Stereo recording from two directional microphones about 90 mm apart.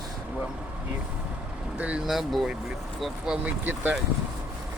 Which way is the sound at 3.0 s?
10° right (ahead or behind).